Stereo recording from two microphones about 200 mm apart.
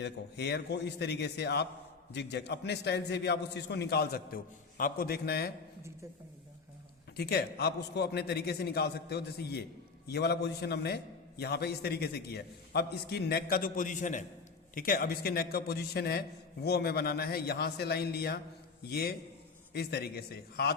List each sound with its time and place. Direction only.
0.0 s a man's voice: 55° left (ahead or behind)
7.2 s a man's voice: 55° left (ahead or behind)